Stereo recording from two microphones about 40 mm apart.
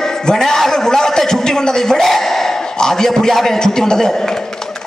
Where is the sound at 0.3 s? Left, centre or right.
Centre.